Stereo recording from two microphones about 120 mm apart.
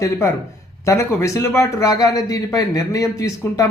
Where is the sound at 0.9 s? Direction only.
25° left (ahead or behind).